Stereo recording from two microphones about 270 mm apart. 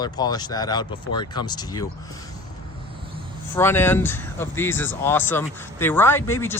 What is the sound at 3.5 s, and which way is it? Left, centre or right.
Speech, centre.